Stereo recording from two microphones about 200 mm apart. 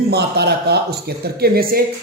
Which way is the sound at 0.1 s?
55° right (ahead or behind).